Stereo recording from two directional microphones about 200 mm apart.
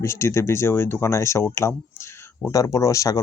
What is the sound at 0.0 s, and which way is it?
Speech, 15° left (ahead or behind).